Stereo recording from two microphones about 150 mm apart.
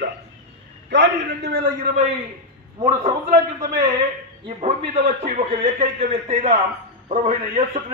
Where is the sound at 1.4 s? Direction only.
90° right.